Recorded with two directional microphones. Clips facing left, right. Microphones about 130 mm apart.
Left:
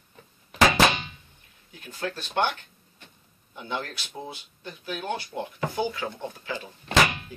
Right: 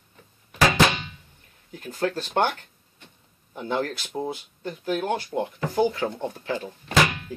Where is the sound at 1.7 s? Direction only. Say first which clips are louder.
Right 6 dB; 45° right (ahead or behind).